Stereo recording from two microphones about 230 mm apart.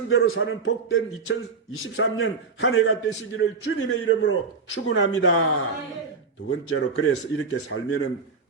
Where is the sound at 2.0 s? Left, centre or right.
Left.